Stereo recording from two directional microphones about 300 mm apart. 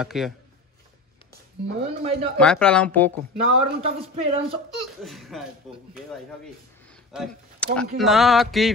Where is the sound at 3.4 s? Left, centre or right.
Right.